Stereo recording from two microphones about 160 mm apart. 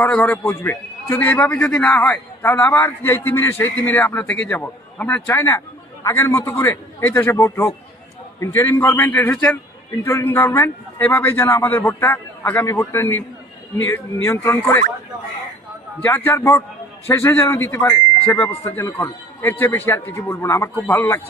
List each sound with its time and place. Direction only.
0.0 s a man's voice: 10° left (ahead or behind)
16.3 s a man's voice: 15° left (ahead or behind)